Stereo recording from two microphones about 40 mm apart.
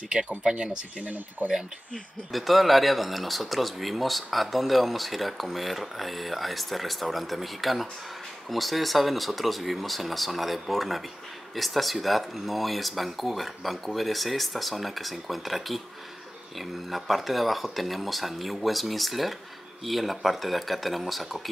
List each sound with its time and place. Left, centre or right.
0.4 s speech: right
2.3 s speech: centre